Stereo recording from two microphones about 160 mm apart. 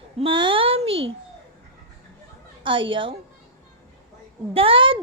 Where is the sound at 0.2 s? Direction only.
30° right (ahead or behind).